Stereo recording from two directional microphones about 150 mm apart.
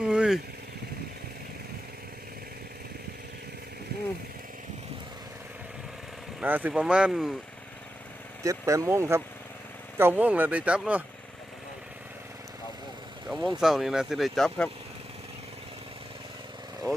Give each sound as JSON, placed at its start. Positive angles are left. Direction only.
{"t": 0.0, "sound": "vehicle", "side_deg": -5}
{"t": 6.4, "sound": "speech", "side_deg": -10}
{"t": 8.4, "sound": "speech", "side_deg": -20}
{"t": 13.2, "sound": "vehicle", "side_deg": 0}
{"t": 13.6, "sound": "speech", "side_deg": 0}